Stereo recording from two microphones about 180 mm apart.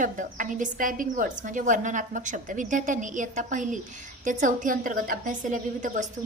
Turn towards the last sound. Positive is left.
turn(degrees=-45)  # may be behind; listen again after turning